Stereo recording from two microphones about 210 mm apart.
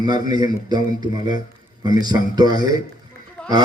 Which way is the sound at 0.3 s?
20° right (ahead or behind).